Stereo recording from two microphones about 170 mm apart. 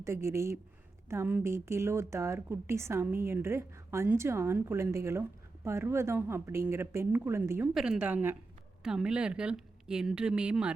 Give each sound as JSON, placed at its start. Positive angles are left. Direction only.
{"t": 0.0, "sound": "a woman's voice", "side_deg": -15}
{"t": 7.7, "sound": "a woman's voice", "side_deg": -5}